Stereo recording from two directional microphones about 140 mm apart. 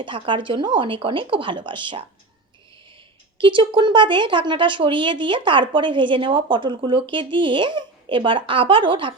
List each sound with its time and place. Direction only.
0.0 s speech: 35° right (ahead or behind)
3.3 s speech: 35° right (ahead or behind)